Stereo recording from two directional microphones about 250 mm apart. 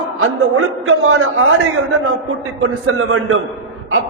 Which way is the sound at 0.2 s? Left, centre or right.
Right.